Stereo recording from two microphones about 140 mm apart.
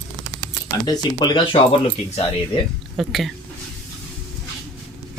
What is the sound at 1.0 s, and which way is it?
Speech, 30° left (ahead or behind).